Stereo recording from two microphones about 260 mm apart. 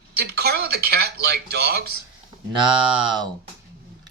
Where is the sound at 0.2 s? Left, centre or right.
Right.